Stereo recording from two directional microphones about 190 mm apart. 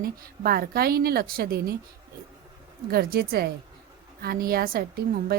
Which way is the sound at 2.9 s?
55° right (ahead or behind).